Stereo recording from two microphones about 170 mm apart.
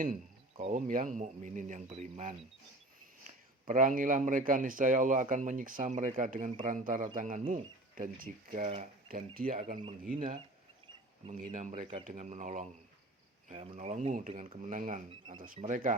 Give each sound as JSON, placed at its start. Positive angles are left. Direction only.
{"t": 0.7, "sound": "speech", "side_deg": -50}
{"t": 9.0, "sound": "speech", "side_deg": -60}
{"t": 13.5, "sound": "speech", "side_deg": -35}